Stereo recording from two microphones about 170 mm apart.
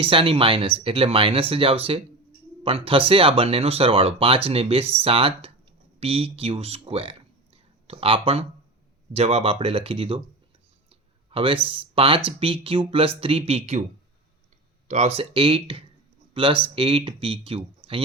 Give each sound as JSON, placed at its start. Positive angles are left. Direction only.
{"t": 0.0, "sound": "speech", "side_deg": -30}
{"t": 11.3, "sound": "speech", "side_deg": -30}
{"t": 14.8, "sound": "speech", "side_deg": -40}